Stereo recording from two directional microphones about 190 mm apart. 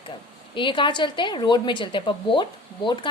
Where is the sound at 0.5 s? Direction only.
25° left (ahead or behind).